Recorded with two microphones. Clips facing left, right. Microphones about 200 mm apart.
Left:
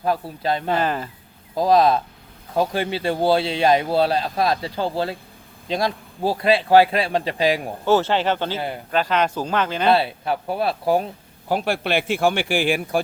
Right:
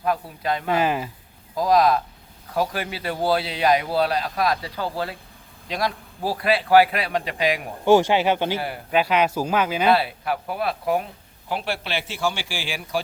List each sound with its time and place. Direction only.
0.0 s a man's voice: 30° left (ahead or behind)
0.7 s speech: 10° right (ahead or behind)
1.5 s a man's voice: 25° left (ahead or behind)
7.9 s speech: 15° right (ahead or behind)
8.5 s a man's voice: 20° left (ahead or behind)
8.9 s speech: 10° right (ahead or behind)
9.9 s a man's voice: 25° left (ahead or behind)
11.4 s a man's voice: 45° left (ahead or behind)